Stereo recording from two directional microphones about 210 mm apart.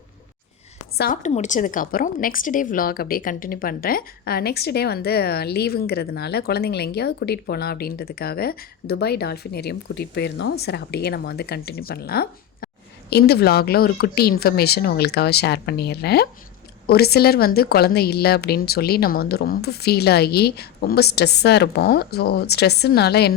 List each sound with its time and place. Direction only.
0.9 s a woman's voice: 40° left (ahead or behind)